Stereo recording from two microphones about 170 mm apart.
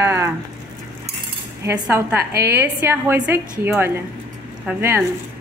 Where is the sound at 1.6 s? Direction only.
15° right (ahead or behind).